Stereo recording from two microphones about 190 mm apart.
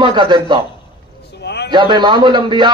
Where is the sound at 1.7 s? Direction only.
25° right (ahead or behind).